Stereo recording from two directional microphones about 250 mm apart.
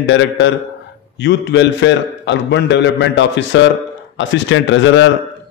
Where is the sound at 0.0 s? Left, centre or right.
Left.